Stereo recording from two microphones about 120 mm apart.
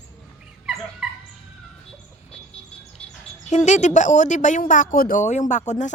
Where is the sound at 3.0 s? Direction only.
10° left (ahead or behind).